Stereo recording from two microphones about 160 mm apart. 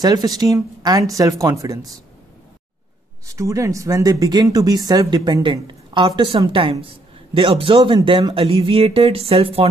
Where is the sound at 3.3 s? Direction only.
20° right (ahead or behind).